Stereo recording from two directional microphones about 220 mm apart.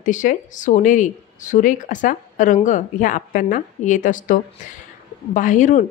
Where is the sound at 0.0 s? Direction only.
35° left (ahead or behind).